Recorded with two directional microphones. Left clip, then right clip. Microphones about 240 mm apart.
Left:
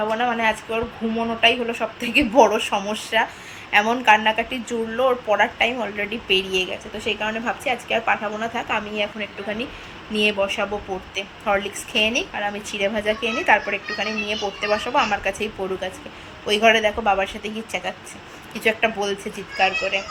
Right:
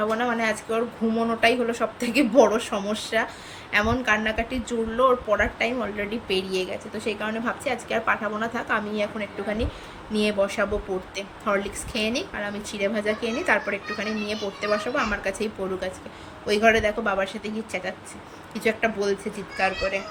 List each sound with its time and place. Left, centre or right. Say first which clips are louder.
0.2 s a woman's voice: left 4 dB; centre